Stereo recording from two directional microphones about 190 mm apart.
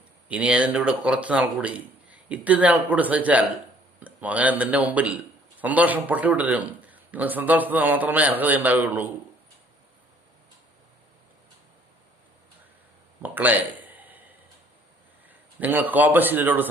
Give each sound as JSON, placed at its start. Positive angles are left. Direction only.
{"t": 0.3, "sound": "speech", "side_deg": -5}
{"t": 13.2, "sound": "a sound", "side_deg": -10}
{"t": 15.3, "sound": "a man's voice", "side_deg": -10}